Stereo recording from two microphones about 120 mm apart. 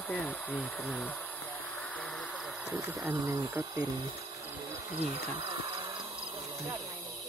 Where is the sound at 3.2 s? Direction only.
30° right (ahead or behind).